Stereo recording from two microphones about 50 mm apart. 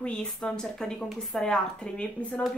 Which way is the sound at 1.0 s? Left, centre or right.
Centre.